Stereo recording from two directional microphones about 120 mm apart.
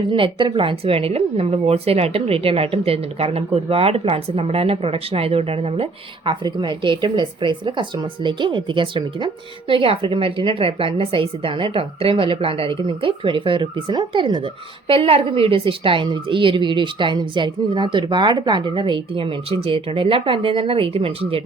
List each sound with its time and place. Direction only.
0.1 s speech: 40° right (ahead or behind)
6.4 s speech: 40° right (ahead or behind)